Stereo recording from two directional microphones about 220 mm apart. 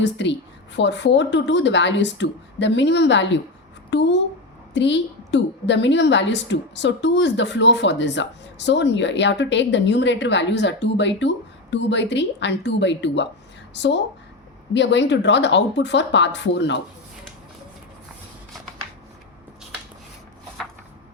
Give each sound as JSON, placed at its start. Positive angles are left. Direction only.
{"t": 0.0, "sound": "a woman's voice", "side_deg": 55}